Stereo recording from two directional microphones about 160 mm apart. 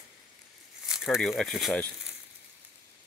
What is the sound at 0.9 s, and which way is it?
Speech, 5° right (ahead or behind).